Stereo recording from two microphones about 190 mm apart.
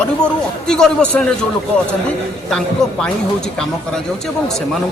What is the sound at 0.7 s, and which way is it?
Speech, 5° left (ahead or behind).